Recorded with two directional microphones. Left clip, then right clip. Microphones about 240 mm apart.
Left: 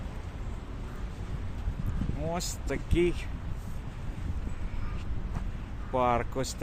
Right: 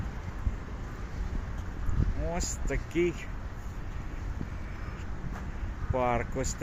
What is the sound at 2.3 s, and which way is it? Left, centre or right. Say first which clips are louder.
Speech: left 1 dB; centre.